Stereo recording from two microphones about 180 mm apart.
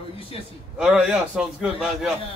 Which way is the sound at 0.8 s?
5° right (ahead or behind).